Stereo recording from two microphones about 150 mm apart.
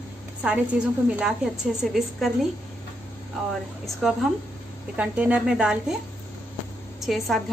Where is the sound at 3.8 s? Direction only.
Centre (ahead or behind).